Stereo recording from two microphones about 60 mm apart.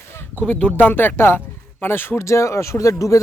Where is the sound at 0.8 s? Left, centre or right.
Left.